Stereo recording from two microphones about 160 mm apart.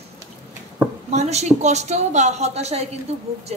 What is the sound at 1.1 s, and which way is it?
Speech, 45° right (ahead or behind).